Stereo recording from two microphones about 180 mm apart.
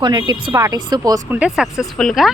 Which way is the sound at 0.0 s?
25° right (ahead or behind).